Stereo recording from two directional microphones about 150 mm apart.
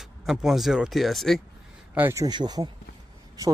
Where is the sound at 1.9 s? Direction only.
20° right (ahead or behind).